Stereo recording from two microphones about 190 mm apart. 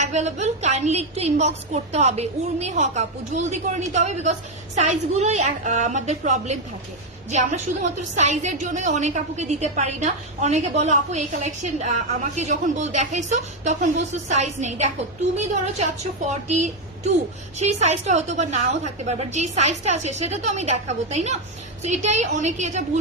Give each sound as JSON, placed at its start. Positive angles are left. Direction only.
{"t": 0.0, "sound": "a woman's voice", "side_deg": -35}